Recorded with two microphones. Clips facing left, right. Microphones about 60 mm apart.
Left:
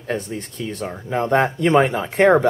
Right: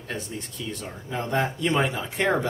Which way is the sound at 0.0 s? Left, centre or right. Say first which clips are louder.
Left 8 dB; left.